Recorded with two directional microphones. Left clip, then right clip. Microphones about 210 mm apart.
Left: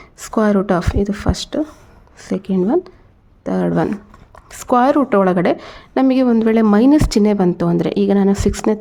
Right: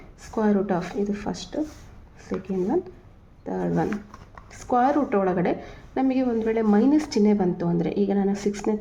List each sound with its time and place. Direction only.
0.2 s a woman's voice: 50° left (ahead or behind)